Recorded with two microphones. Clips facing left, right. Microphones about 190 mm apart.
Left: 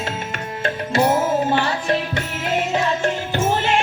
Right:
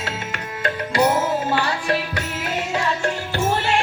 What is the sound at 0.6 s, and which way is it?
Music, 25° left (ahead or behind).